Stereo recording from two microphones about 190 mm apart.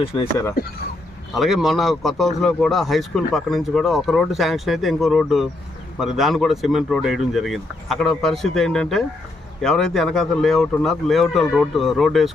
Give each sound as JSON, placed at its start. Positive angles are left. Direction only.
{"t": 0.1, "sound": "speech", "side_deg": 20}
{"t": 1.3, "sound": "speech", "side_deg": 0}